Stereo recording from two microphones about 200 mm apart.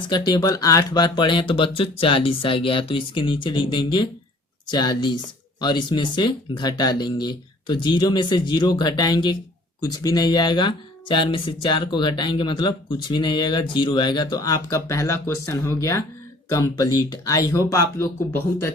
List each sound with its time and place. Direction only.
0.1 s speech: 20° left (ahead or behind)